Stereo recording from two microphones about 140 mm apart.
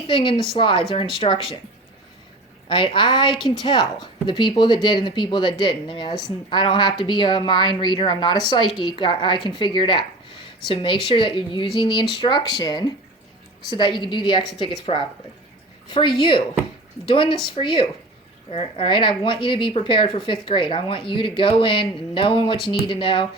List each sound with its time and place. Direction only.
0.1 s speech: 35° left (ahead or behind)
2.6 s speech: 35° left (ahead or behind)
3.3 s a woman's voice: centre (ahead or behind)
3.6 s speech: 35° left (ahead or behind)
15.9 s speech: 35° left (ahead or behind)
17.4 s speech: 35° left (ahead or behind)